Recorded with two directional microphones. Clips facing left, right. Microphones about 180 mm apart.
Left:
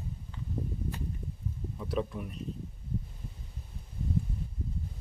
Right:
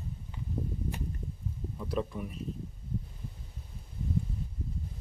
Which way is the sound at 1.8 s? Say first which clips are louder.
Even; centre (ahead or behind).